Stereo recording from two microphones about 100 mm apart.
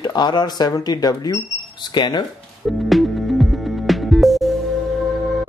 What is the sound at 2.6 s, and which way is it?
Music, centre (ahead or behind).